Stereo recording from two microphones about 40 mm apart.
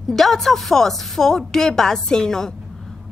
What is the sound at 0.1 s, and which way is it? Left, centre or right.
A woman's voice, centre.